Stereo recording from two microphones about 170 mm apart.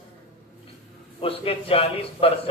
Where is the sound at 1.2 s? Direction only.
35° left (ahead or behind).